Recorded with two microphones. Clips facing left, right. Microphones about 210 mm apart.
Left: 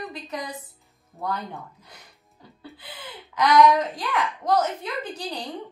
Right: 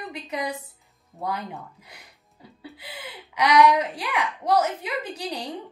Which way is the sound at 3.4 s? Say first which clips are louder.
Left 1 dB; 10° right (ahead or behind).